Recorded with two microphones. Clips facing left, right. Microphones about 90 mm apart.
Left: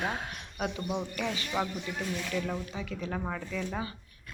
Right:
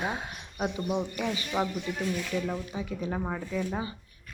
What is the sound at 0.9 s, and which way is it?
Speech, 5° right (ahead or behind).